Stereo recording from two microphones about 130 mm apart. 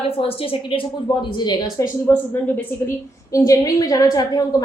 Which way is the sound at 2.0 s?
15° left (ahead or behind).